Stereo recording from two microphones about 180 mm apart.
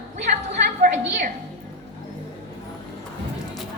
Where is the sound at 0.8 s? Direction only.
50° right (ahead or behind).